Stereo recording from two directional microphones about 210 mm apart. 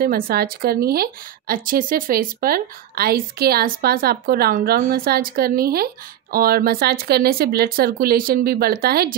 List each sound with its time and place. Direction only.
0.0 s a woman's voice: 45° right (ahead or behind)